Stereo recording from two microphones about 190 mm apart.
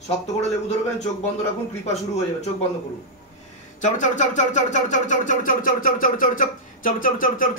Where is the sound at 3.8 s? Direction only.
40° left (ahead or behind).